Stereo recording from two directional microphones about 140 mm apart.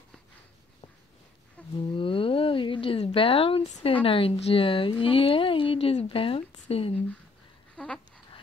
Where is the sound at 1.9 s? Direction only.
40° left (ahead or behind).